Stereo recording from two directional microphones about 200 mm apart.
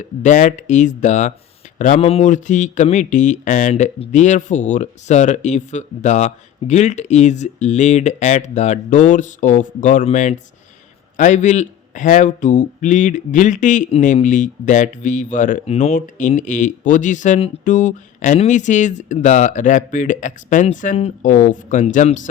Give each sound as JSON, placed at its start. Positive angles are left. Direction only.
{"t": 0.0, "sound": "speech", "side_deg": 40}